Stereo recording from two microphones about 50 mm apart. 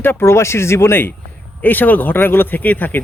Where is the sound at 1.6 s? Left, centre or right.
Left.